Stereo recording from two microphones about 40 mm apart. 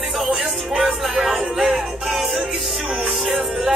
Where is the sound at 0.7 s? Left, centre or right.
Centre.